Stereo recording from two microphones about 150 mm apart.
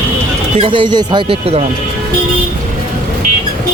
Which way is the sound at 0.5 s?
35° right (ahead or behind).